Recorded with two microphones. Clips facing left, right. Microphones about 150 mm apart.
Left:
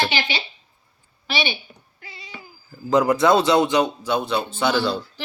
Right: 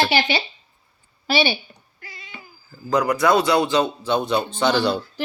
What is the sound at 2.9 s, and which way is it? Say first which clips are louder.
Speech: left 2 dB; 25° left (ahead or behind).